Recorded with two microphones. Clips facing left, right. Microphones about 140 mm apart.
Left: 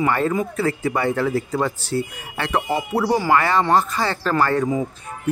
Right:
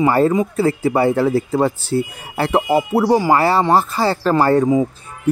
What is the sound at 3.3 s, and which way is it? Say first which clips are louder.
Speech: right 3 dB; 35° right (ahead or behind).